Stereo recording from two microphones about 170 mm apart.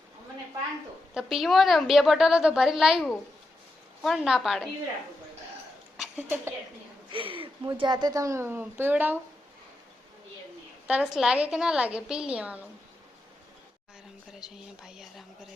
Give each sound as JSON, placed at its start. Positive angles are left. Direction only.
{"t": 1.1, "sound": "a woman's voice", "side_deg": 0}
{"t": 4.0, "sound": "a woman's voice", "side_deg": 0}
{"t": 6.2, "sound": "a woman's voice", "side_deg": -15}
{"t": 7.1, "sound": "speech", "side_deg": -30}
{"t": 10.8, "sound": "a woman's voice", "side_deg": -5}
{"t": 14.3, "sound": "a woman's voice", "side_deg": -5}